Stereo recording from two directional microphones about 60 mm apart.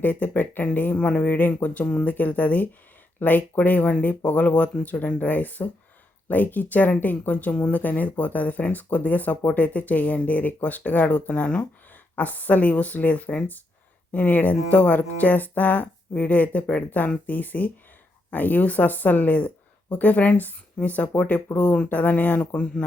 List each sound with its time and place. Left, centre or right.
0.0 s speech: left
22.4 s speech: centre